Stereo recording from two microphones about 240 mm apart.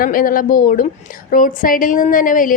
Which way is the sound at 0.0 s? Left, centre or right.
Left.